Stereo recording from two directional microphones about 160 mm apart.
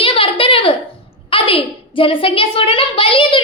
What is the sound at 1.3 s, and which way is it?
A child's voice, 35° left (ahead or behind).